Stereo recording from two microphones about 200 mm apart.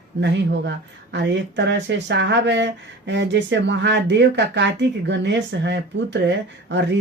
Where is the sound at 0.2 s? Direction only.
60° right (ahead or behind).